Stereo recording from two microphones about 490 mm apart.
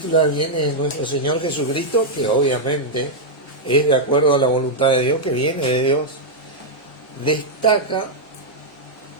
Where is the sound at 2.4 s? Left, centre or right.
Left.